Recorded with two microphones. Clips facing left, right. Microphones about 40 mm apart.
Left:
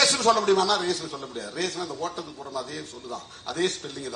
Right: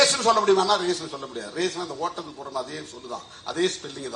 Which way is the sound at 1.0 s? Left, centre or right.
Right.